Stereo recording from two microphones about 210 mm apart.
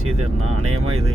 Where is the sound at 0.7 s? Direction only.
90° right.